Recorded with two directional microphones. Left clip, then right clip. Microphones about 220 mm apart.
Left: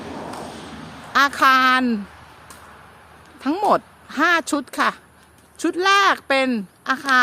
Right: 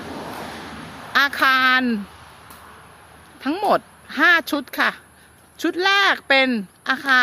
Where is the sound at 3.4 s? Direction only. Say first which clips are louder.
Left 1 dB; 10° left (ahead or behind).